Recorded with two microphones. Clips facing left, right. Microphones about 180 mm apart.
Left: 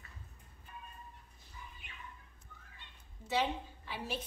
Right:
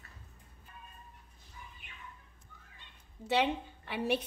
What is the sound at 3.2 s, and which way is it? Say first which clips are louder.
Speech: right 4 dB; 65° right (ahead or behind).